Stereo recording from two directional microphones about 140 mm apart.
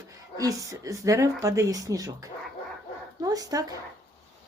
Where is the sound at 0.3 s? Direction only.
25° right (ahead or behind).